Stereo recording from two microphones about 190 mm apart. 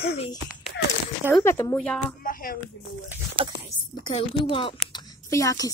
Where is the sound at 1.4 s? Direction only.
15° left (ahead or behind).